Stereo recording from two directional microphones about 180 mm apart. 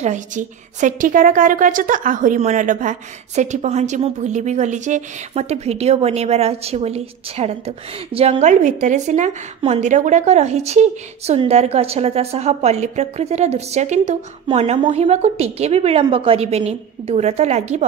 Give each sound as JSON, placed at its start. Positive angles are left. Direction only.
{"t": 0.0, "sound": "a woman's voice", "side_deg": -45}